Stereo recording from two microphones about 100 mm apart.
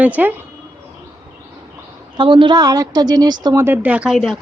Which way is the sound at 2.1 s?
55° right (ahead or behind).